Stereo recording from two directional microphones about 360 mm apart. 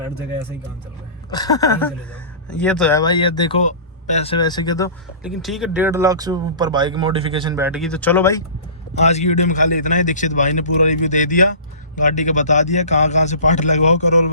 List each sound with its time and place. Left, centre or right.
1.3 s speech: centre
5.2 s speech: centre
9.0 s a man's voice: centre